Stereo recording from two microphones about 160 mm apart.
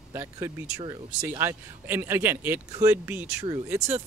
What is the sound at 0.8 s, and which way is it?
Speech, 25° right (ahead or behind).